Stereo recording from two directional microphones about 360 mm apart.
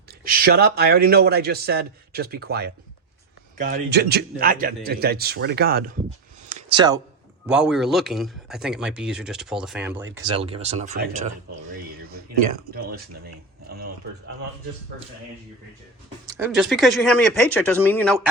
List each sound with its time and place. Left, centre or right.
0.1 s speech: right
6.5 s a sound: centre
7.4 s speech: centre
10.3 s speech: centre
11.9 s a sound: right
16.2 s speech: centre